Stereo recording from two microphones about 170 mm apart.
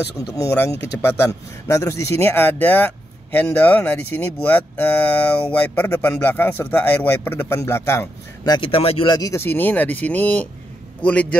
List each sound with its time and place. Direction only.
0.3 s speech: 15° left (ahead or behind)
8.5 s speech: 35° left (ahead or behind)
9.1 s speech: 20° left (ahead or behind)